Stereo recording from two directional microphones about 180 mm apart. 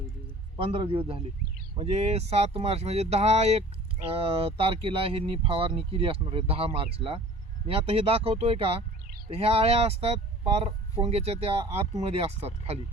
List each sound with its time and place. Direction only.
0.5 s a man's voice: 30° right (ahead or behind)